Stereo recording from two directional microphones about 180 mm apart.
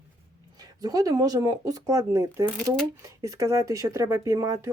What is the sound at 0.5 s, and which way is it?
Speech, 20° right (ahead or behind).